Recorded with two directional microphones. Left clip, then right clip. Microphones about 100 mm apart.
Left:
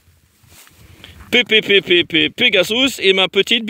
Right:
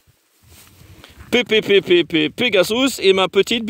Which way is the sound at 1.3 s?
30° right (ahead or behind).